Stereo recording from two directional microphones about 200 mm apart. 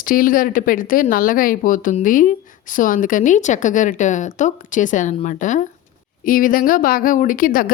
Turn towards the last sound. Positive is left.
turn(degrees=45)  # may be behind; listen again after turning